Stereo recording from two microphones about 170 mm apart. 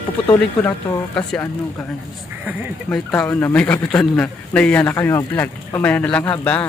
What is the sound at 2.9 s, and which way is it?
Speech, 5° left (ahead or behind).